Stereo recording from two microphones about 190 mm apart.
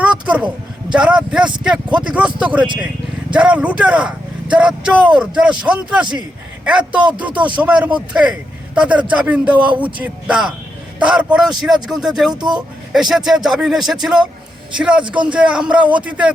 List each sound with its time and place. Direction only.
0.0 s a sound: 5° right (ahead or behind)
0.9 s speech: 5° right (ahead or behind)
12.3 s speech: 20° right (ahead or behind)
12.5 s speech: centre (ahead or behind)